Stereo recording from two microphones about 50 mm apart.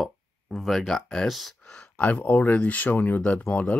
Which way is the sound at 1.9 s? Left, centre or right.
Left.